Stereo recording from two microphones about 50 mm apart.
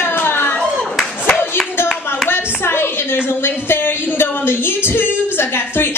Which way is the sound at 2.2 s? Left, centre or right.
Left.